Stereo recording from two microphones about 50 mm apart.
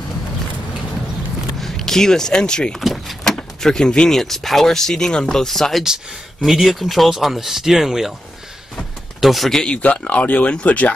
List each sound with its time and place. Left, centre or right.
1.6 s speech: centre
2.7 s speech: centre
3.3 s speech: centre
9.2 s speech: centre
9.7 s speech: left